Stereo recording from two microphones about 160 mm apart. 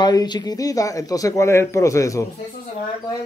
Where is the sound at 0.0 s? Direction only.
25° left (ahead or behind).